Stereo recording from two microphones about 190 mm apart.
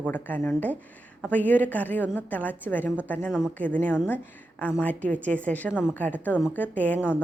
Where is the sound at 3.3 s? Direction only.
5° right (ahead or behind).